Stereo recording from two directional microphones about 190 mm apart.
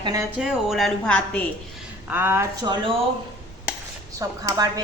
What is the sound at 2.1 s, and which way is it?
Speech, 10° right (ahead or behind).